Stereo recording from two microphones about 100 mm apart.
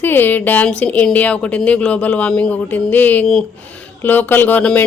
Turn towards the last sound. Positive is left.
turn(degrees=10)  # may be behind; listen again after turning